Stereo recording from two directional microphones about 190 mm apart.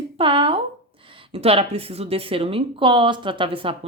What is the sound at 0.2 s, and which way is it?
Speech, 25° right (ahead or behind).